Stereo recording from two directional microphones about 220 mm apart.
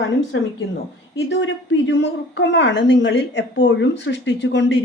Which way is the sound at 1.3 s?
55° left (ahead or behind).